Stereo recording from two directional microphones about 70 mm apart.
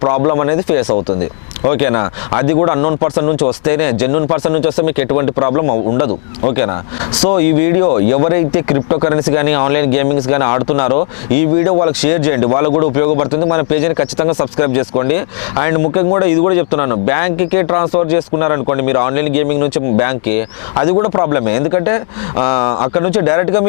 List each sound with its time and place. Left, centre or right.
0.0 s speech: left